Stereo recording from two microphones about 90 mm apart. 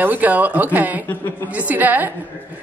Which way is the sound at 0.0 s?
20° right (ahead or behind).